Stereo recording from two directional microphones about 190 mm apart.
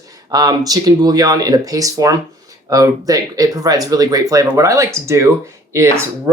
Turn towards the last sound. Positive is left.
turn(degrees=-15)  # may be behind; listen again after turning